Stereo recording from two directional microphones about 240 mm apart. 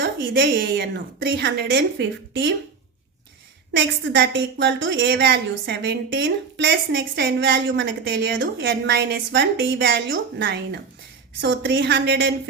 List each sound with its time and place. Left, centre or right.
0.0 s a woman's voice: right
3.7 s a woman's voice: right